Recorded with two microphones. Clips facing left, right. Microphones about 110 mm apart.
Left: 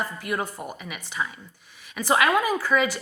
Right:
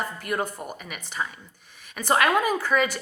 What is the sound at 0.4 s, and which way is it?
A woman's voice, 50° right (ahead or behind).